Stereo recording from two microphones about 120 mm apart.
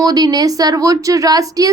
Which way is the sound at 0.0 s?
30° right (ahead or behind).